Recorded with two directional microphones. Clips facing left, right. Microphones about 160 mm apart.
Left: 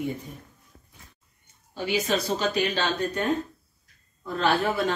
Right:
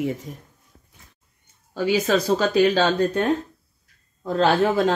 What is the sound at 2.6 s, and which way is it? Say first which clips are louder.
Speech: right 8 dB; 90° right.